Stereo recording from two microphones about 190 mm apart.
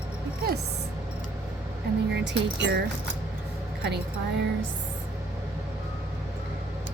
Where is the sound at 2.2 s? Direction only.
65° right (ahead or behind).